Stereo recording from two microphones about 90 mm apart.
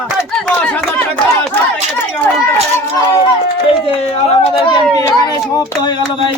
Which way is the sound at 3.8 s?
90° left.